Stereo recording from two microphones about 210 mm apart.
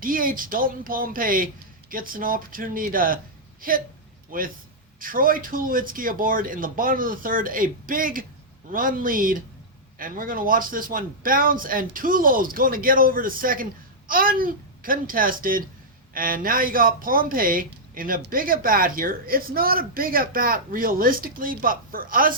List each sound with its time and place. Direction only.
0.0 s a man's voice: 40° right (ahead or behind)